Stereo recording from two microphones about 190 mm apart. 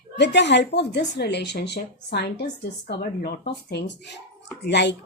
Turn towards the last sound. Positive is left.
turn(degrees=60)  # may be behind; listen again after turning